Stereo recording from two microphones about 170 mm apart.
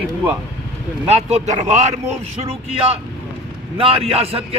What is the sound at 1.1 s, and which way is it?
A man's voice, 40° right (ahead or behind).